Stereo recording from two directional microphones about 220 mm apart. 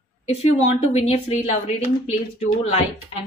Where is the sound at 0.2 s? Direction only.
30° left (ahead or behind).